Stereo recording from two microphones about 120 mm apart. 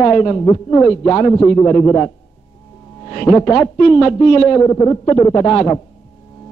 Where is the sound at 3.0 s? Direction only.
40° left (ahead or behind).